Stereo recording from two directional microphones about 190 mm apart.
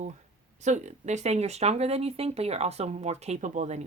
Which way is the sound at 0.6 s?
40° right (ahead or behind).